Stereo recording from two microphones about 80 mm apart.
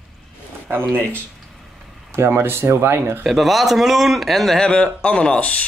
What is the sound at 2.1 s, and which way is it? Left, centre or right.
Speech, right.